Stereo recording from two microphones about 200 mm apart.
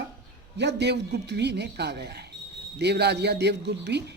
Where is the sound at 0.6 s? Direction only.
60° right (ahead or behind).